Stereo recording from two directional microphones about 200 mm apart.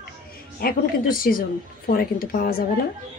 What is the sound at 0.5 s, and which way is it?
A woman's voice, 45° left (ahead or behind).